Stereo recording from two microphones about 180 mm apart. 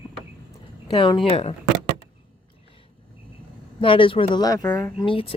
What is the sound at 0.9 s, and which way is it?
Speech, 30° left (ahead or behind).